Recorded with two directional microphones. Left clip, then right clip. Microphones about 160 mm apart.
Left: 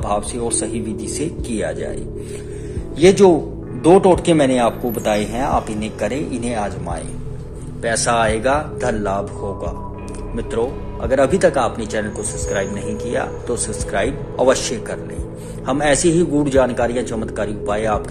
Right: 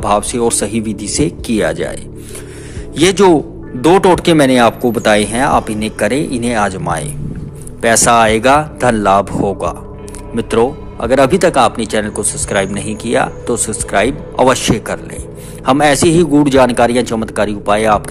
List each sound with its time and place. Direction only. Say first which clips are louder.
0.0 s speech: right 8 dB; 35° right (ahead or behind)
3.0 s speech: right 2 dB; 45° right (ahead or behind)